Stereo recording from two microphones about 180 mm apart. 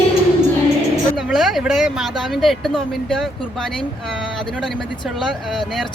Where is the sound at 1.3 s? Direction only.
Centre (ahead or behind).